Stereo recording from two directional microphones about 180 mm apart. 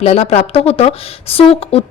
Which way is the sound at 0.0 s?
35° left (ahead or behind).